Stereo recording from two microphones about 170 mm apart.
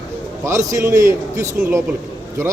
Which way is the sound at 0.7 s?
15° right (ahead or behind).